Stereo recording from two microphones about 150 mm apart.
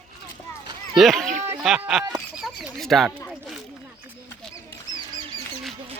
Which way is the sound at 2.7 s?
Centre (ahead or behind).